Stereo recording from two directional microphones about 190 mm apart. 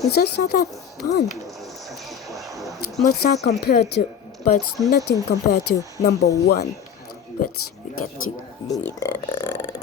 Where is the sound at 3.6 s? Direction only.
60° left (ahead or behind).